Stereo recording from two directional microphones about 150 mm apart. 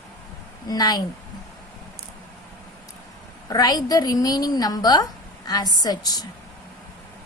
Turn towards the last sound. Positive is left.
turn(degrees=25)  # may be behind; listen again after turning